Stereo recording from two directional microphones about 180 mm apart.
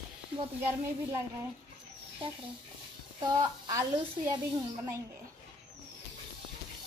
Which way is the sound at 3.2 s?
20° right (ahead or behind).